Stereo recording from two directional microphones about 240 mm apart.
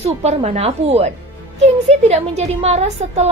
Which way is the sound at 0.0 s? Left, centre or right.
Right.